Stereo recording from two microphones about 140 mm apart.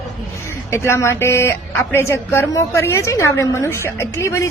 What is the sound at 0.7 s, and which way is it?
A woman's voice, 20° left (ahead or behind).